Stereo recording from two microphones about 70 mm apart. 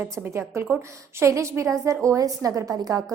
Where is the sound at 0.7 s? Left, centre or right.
Right.